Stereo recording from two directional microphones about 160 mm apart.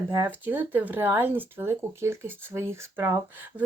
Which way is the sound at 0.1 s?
15° right (ahead or behind).